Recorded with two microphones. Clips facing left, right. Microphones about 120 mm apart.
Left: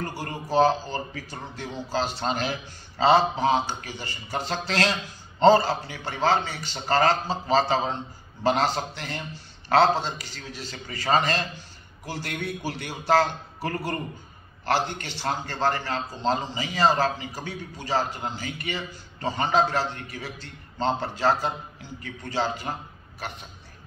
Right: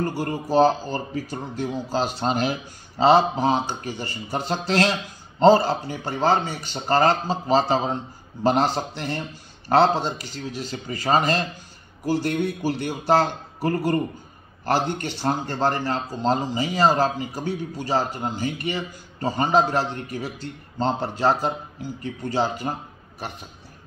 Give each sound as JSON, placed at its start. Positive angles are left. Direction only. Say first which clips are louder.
{"t": 0.0, "sound": "a man's voice", "louder": "right 7 dB", "side_deg": -45}